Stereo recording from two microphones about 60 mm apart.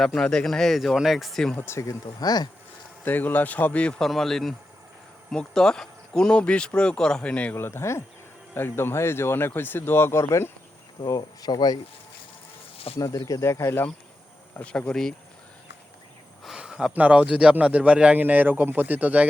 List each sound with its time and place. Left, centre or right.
0.0 s speech: centre
1.6 s speech: left
3.0 s a man's voice: left
4.0 s speech: centre; by 7.5 s left
7.5 s speech: left
11.0 s speech: left
13.0 s speech: left
13.4 s speech: left
14.6 s speech: centre
16.6 s a sound: centre
16.9 s a man's voice: right
18.2 s a man's voice: right